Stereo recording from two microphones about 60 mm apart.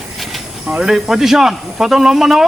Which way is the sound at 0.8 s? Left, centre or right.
Centre.